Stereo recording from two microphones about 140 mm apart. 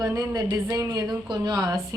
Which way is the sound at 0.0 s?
25° right (ahead or behind).